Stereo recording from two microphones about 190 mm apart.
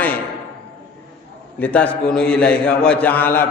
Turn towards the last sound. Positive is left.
turn(degrees=10)  # may be behind; listen again after turning